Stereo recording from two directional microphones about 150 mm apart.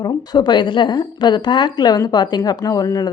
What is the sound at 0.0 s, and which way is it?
A woman's voice, 25° left (ahead or behind).